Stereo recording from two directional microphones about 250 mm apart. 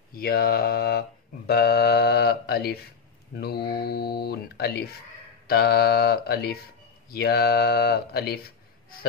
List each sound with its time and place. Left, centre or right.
0.1 s speech: left